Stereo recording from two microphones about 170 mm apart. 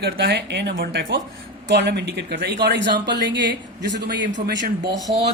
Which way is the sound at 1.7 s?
90° right.